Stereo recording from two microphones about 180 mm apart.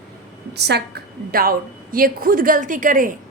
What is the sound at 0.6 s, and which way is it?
A woman's voice, 65° right (ahead or behind).